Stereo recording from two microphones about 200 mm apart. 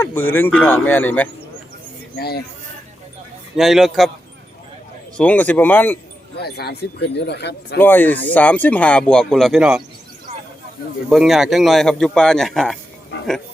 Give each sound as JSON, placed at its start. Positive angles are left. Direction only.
{"t": 0.0, "sound": "speech", "side_deg": 10}
{"t": 2.1, "sound": "speech", "side_deg": 55}
{"t": 3.6, "sound": "a man's voice", "side_deg": 0}
{"t": 5.1, "sound": "speech", "side_deg": 5}
{"t": 6.3, "sound": "speech", "side_deg": 55}
{"t": 7.8, "sound": "speech", "side_deg": 10}
{"t": 11.1, "sound": "a man's voice", "side_deg": 0}